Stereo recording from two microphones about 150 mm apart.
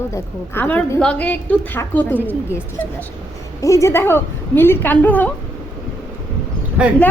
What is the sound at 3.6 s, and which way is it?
A woman's voice, 20° left (ahead or behind).